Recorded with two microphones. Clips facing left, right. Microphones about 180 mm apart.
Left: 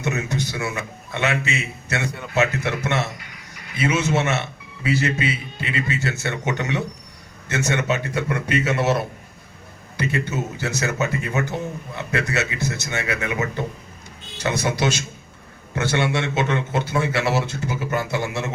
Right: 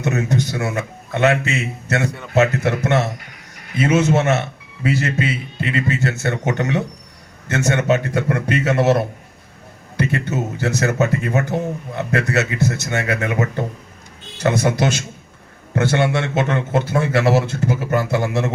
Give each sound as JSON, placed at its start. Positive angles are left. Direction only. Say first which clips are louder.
{"t": 0.0, "sound": "speech", "louder": "right 5 dB", "side_deg": -45}